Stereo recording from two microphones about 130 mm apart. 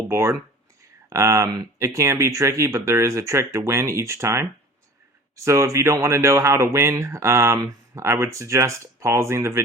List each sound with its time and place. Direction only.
0.1 s speech: 20° right (ahead or behind)
5.5 s speech: 20° right (ahead or behind)